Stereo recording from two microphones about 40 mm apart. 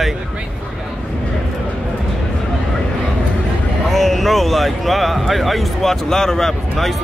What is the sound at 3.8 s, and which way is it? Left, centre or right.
Speech, centre.